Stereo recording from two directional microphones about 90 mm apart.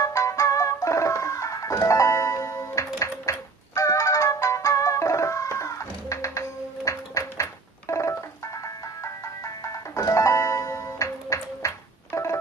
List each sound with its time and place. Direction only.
0.0 s music: 35° left (ahead or behind)